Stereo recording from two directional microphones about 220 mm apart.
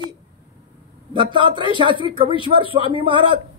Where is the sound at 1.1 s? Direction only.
20° right (ahead or behind).